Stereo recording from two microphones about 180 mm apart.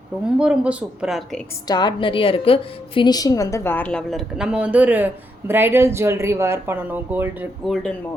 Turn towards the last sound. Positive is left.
turn(degrees=0)  # may be behind; listen again after turning